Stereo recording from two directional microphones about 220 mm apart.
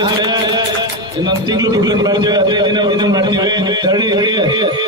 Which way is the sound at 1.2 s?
20° right (ahead or behind).